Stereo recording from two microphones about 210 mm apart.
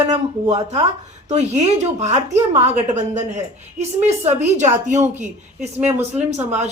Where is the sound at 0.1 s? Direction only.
30° right (ahead or behind).